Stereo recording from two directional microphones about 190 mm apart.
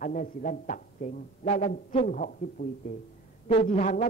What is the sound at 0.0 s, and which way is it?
A man's voice, 40° left (ahead or behind).